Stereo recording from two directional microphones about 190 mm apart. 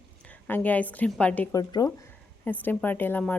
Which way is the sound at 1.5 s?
20° left (ahead or behind).